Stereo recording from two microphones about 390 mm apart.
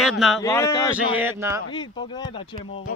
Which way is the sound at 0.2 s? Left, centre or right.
Centre.